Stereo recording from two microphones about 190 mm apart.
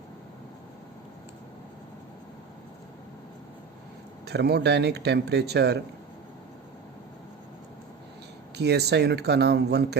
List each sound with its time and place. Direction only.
4.3 s speech: 60° right (ahead or behind)
8.5 s speech: 60° right (ahead or behind)